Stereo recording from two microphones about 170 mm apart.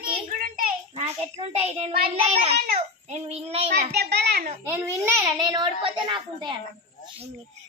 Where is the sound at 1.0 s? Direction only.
40° right (ahead or behind).